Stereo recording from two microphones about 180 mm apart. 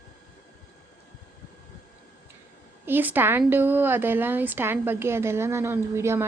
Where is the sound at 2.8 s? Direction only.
10° right (ahead or behind).